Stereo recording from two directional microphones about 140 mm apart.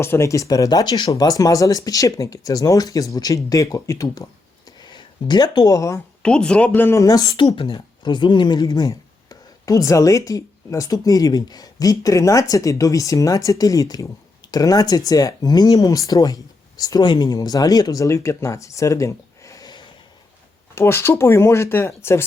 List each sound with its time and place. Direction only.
0.0 s speech: 20° left (ahead or behind)
6.2 s speech: 5° left (ahead or behind); by 7.4 s 25° left (ahead or behind)
7.4 s speech: 40° left (ahead or behind)
20.7 s speech: 20° left (ahead or behind)